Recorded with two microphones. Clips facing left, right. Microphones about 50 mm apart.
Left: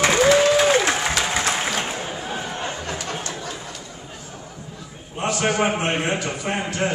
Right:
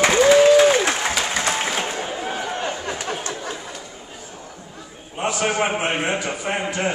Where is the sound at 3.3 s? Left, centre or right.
Right.